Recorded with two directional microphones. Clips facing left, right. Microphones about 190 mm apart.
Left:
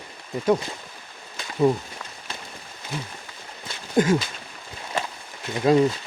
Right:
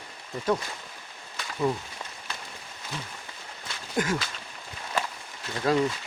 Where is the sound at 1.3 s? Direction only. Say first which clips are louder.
Left 7 dB; 25° left (ahead or behind).